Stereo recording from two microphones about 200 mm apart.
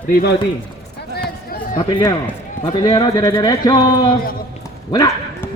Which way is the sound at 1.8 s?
20° left (ahead or behind).